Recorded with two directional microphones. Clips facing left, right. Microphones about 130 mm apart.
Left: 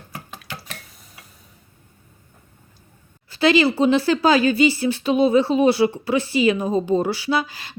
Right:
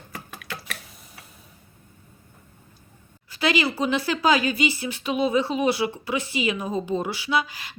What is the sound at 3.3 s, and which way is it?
Speech, 30° left (ahead or behind).